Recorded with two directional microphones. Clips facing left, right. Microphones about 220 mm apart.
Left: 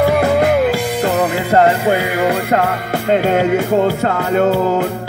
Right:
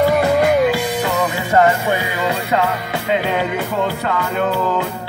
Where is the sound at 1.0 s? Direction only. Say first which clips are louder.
Left 4 dB; 45° left (ahead or behind).